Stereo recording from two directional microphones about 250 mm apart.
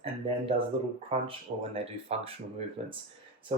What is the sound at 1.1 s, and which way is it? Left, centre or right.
Speech, right.